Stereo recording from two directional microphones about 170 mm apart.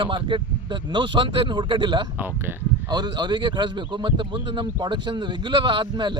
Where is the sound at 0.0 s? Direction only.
30° right (ahead or behind).